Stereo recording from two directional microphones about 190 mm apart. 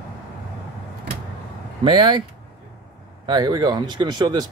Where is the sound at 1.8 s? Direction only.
25° right (ahead or behind).